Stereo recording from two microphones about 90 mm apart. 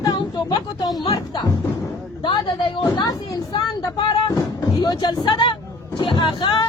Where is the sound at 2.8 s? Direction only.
50° left (ahead or behind).